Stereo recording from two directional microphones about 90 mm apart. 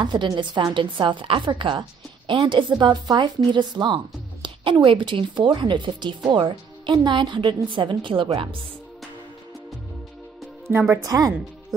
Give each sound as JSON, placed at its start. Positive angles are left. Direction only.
{"t": 0.0, "sound": "a woman's voice", "side_deg": -60}
{"t": 10.7, "sound": "speech", "side_deg": -25}
{"t": 11.0, "sound": "speech", "side_deg": -40}